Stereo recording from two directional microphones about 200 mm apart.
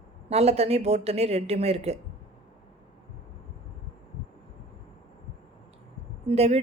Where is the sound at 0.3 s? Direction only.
30° right (ahead or behind).